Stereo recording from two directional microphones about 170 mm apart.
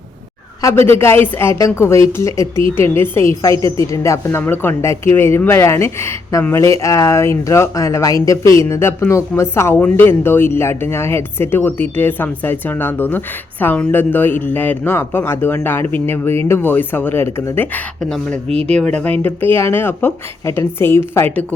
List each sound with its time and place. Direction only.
0.6 s speech: 15° left (ahead or behind)